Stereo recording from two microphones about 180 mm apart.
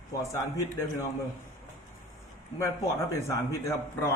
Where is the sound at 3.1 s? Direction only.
15° left (ahead or behind).